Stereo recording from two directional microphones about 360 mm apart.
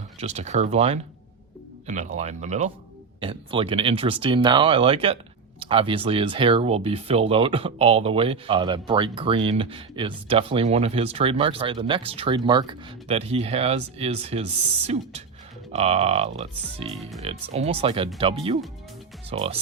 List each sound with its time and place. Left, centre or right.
0.2 s speech: centre